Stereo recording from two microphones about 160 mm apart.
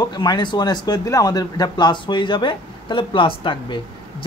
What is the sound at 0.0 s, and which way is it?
Speech, 25° left (ahead or behind).